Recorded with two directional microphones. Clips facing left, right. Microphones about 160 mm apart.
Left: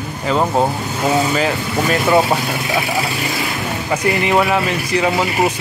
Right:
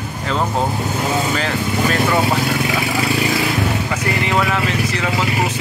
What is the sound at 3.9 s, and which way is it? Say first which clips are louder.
Speech: left 4 dB; 15° left (ahead or behind).